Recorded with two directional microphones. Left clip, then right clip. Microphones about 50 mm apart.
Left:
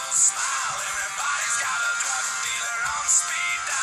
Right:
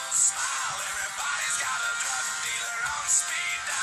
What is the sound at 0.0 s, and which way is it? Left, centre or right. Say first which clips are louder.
Music: left 4 dB; left.